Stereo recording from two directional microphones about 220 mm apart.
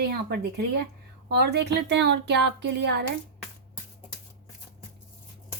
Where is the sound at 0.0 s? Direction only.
50° right (ahead or behind).